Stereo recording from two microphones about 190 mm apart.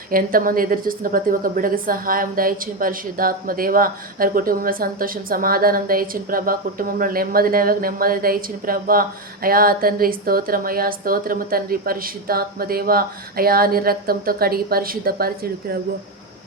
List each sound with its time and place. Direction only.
0.1 s a woman's voice: 50° right (ahead or behind)